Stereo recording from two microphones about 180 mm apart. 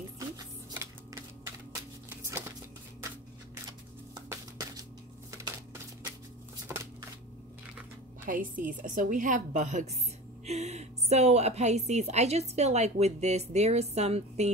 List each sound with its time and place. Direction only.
0.4 s a sound: 20° right (ahead or behind)
4.1 s music: 20° right (ahead or behind)
8.3 s a woman's voice: 50° right (ahead or behind)